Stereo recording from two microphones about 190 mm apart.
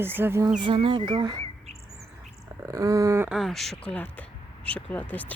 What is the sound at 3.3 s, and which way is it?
Speech, centre (ahead or behind).